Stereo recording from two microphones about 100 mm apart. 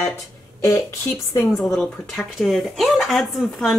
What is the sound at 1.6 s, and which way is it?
Speech, 5° left (ahead or behind).